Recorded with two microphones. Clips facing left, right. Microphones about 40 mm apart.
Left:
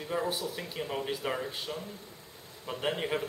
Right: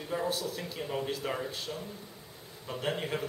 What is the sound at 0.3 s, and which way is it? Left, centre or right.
Speech, centre.